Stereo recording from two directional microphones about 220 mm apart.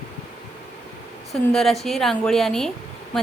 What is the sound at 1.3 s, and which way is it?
A woman's voice, centre (ahead or behind).